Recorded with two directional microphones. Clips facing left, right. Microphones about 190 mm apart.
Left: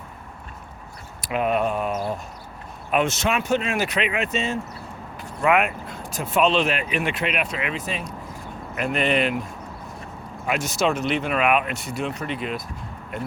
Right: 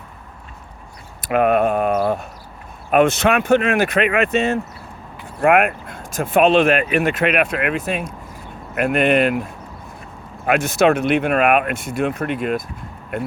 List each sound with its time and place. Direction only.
1.2 s speech: 60° right (ahead or behind)
10.4 s speech: 60° right (ahead or behind)